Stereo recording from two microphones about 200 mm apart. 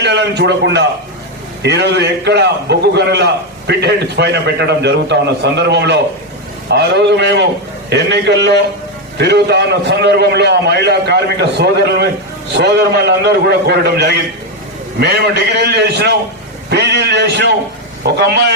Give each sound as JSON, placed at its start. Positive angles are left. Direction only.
{"t": 0.0, "sound": "a man's voice", "side_deg": -60}